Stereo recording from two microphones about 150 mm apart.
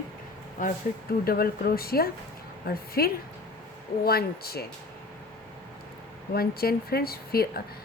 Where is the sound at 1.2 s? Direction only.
90° left.